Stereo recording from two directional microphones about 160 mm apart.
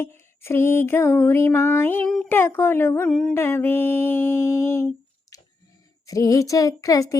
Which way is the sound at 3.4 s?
15° left (ahead or behind).